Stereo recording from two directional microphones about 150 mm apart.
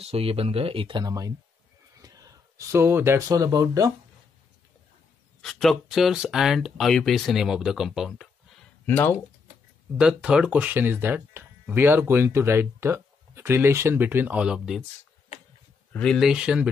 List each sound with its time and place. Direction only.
0.0 s speech: 40° right (ahead or behind); by 3.9 s 25° right (ahead or behind)
5.4 s speech: centre (ahead or behind)
8.8 s speech: 15° left (ahead or behind)
9.9 s speech: 5° right (ahead or behind)
15.9 s speech: 5° left (ahead or behind)